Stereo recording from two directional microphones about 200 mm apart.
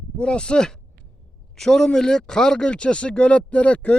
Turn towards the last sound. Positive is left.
turn(degrees=5)  # may be behind; listen again after turning